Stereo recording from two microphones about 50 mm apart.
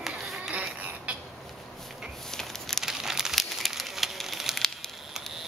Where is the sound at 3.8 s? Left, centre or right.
Centre.